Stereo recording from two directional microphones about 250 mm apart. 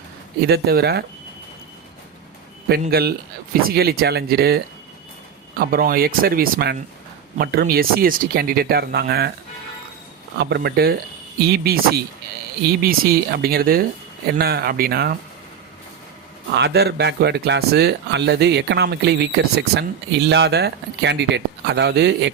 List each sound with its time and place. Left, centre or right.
0.4 s speech: right
2.6 s speech: right
10.3 s speech: right
16.5 s a man's voice: right